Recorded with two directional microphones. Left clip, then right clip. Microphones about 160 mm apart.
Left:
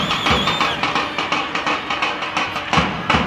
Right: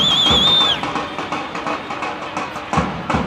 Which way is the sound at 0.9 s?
35° left (ahead or behind).